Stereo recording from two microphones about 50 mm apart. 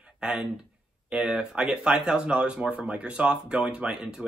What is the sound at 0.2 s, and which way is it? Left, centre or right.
Speech, centre.